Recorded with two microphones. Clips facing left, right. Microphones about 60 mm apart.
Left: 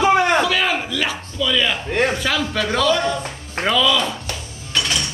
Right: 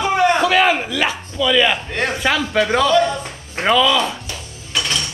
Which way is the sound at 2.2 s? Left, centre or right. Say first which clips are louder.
Right 4 dB; right.